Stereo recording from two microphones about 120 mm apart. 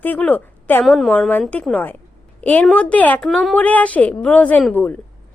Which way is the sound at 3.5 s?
10° left (ahead or behind).